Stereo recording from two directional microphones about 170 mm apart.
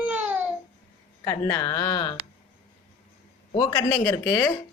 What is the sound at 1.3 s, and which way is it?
Speech, 20° left (ahead or behind).